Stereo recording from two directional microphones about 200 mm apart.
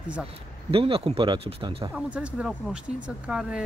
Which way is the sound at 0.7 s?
25° right (ahead or behind).